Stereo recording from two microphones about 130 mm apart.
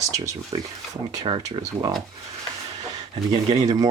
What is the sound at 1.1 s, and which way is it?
Speech, 40° right (ahead or behind).